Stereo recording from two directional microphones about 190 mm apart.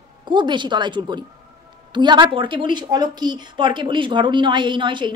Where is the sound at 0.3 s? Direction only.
25° right (ahead or behind).